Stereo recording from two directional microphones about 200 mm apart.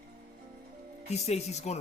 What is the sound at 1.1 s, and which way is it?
Speech, 30° left (ahead or behind).